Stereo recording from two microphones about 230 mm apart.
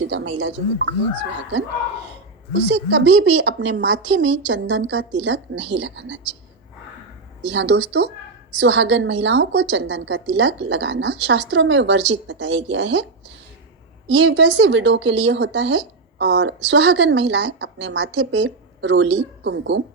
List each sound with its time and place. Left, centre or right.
0.0 s a woman's voice: right
7.5 s a woman's voice: right
14.2 s a woman's voice: right